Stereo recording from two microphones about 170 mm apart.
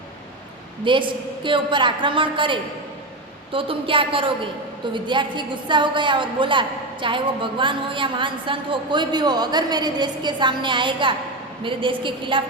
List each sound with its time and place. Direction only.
0.9 s a woman's voice: 30° right (ahead or behind)